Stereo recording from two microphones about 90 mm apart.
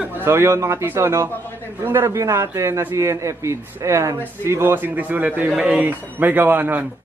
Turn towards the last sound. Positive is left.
turn(degrees=-20)  # may be behind; listen again after turning